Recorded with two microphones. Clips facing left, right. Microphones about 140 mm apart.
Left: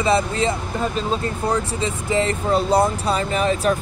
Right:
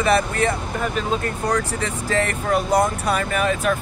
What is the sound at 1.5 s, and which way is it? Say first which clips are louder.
Speech: left 1 dB; 20° left (ahead or behind).